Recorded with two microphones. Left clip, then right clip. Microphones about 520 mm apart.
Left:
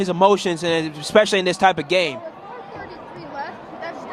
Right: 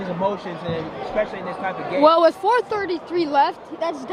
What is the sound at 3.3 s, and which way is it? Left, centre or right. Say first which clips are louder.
Speech: right 11 dB; right.